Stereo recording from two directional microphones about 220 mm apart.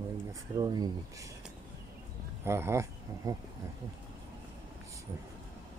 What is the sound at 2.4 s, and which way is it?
Speech, 10° right (ahead or behind).